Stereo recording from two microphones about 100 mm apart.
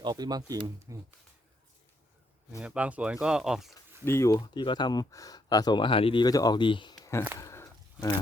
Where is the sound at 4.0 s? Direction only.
25° left (ahead or behind).